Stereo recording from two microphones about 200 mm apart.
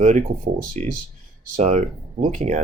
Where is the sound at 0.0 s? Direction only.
40° right (ahead or behind).